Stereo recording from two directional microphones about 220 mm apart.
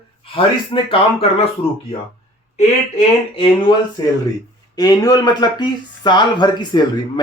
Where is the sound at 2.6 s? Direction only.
30° left (ahead or behind).